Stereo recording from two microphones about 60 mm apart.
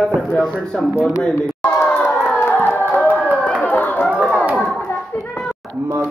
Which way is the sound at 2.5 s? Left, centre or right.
Left.